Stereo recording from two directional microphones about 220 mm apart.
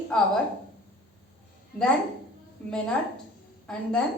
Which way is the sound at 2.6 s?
5° left (ahead or behind).